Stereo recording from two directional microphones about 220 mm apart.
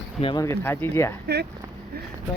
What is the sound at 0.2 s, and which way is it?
Speech, 25° left (ahead or behind).